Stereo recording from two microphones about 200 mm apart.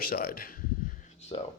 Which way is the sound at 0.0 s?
45° left (ahead or behind).